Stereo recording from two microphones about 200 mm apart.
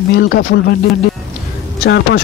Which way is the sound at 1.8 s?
55° left (ahead or behind).